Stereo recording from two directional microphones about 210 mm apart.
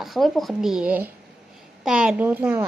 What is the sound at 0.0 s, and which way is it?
A child's voice, centre (ahead or behind).